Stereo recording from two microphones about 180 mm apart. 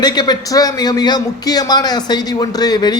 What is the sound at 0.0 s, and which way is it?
A man's voice, 20° left (ahead or behind).